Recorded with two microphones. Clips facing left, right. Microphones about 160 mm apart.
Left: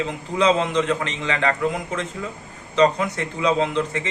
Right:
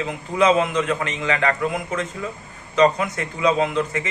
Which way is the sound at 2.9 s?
25° left (ahead or behind).